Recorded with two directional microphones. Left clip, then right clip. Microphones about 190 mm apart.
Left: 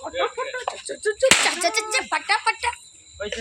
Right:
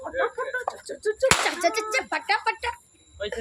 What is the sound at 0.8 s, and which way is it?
Whip, 35° left (ahead or behind).